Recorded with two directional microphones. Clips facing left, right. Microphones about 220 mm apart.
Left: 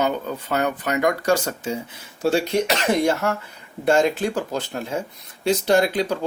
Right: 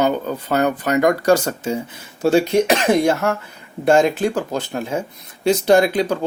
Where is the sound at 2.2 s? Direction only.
50° right (ahead or behind).